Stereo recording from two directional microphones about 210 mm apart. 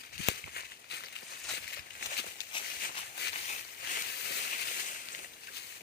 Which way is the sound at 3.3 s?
40° left (ahead or behind).